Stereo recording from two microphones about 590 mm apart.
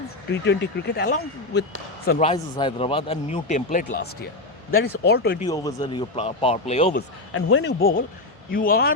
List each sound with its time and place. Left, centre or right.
0.3 s speech: centre
5.5 s speech: centre